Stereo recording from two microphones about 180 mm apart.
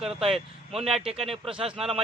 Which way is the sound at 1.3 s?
30° right (ahead or behind).